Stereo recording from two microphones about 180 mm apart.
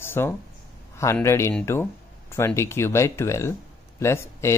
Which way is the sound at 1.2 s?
15° left (ahead or behind).